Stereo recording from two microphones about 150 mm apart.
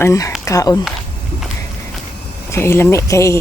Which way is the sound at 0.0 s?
20° left (ahead or behind).